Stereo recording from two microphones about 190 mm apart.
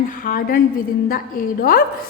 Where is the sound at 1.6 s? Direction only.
50° left (ahead or behind).